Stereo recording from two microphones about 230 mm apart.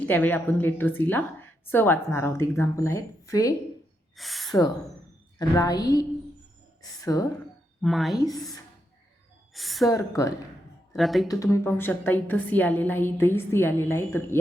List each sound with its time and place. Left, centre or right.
0.0 s a woman's voice: centre
4.2 s speech: centre
5.4 s a woman's voice: centre
7.8 s a woman's voice: centre
8.3 s a woman's voice: centre
9.5 s a sound: centre
9.9 s a woman's voice: centre
10.9 s speech: centre
11.3 s a woman's voice: centre